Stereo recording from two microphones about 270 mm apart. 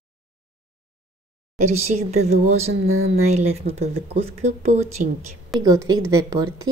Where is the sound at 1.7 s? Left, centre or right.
Right.